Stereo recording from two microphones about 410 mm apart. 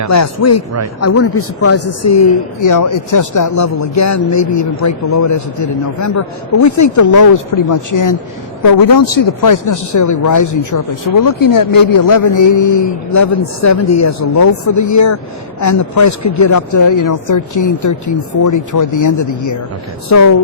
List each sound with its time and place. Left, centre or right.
0.1 s a man's voice: left